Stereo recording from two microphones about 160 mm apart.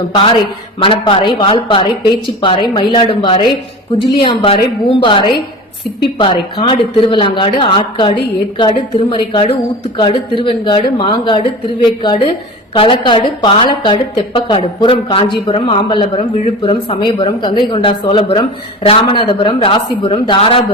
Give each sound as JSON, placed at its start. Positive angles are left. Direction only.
{"t": 0.8, "sound": "a woman's voice", "side_deg": 35}